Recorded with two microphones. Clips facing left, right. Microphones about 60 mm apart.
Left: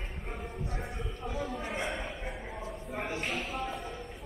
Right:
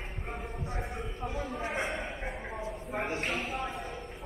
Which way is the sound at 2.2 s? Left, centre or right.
Right.